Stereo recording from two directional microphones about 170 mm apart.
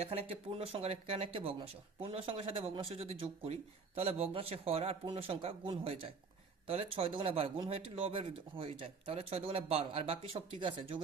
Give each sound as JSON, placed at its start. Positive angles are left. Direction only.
{"t": 0.0, "sound": "speech", "side_deg": -35}